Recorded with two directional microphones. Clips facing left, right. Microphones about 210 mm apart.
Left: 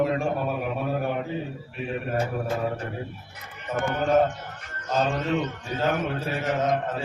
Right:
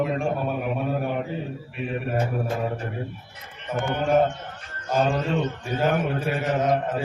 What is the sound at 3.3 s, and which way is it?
A man's voice, 30° right (ahead or behind).